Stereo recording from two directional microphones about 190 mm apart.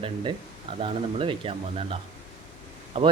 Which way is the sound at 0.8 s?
30° right (ahead or behind).